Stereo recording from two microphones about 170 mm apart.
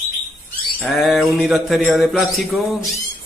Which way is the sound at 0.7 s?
Centre (ahead or behind).